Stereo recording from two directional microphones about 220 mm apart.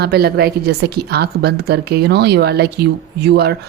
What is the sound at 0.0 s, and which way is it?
A woman's voice, 45° right (ahead or behind).